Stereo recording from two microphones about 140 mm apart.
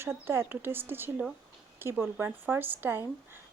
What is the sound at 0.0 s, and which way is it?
Speech, 15° right (ahead or behind).